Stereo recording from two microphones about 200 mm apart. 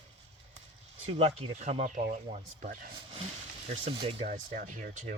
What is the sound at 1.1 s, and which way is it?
Speech, 30° right (ahead or behind).